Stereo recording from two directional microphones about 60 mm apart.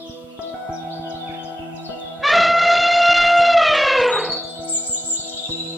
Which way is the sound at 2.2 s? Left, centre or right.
Centre.